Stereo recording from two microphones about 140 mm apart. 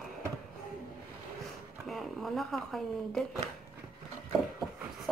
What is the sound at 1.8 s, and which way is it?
Speech, centre (ahead or behind).